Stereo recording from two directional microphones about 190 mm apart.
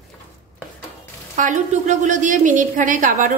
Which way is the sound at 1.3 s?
40° right (ahead or behind).